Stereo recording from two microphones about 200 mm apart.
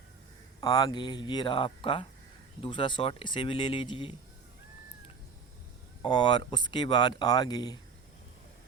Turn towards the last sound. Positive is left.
turn(degrees=20)  # may be behind; listen again after turning